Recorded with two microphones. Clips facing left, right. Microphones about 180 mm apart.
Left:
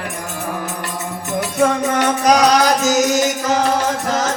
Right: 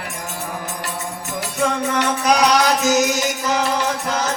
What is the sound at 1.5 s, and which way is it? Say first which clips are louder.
Music: left 4 dB; 50° left (ahead or behind).